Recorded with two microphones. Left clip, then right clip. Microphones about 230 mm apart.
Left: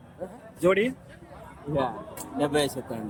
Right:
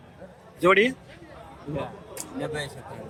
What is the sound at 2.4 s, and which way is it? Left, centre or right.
Speech, left.